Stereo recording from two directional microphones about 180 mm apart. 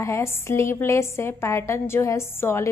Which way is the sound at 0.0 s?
15° left (ahead or behind).